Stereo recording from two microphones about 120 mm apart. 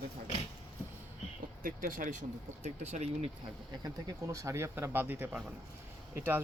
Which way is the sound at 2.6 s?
70° right (ahead or behind).